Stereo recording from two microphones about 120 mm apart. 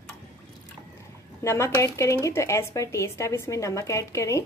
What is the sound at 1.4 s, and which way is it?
A woman's voice, 25° left (ahead or behind).